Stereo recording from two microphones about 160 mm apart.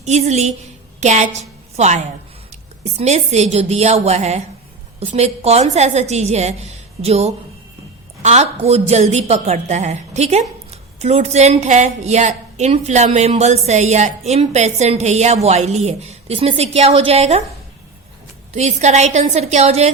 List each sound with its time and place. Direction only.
0.0 s a woman's voice: 45° right (ahead or behind)
18.5 s a woman's voice: 45° right (ahead or behind)